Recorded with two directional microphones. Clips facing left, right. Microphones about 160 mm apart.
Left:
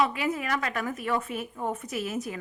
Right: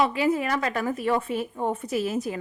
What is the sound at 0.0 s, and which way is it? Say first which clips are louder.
A woman's voice: right 4 dB; 30° right (ahead or behind).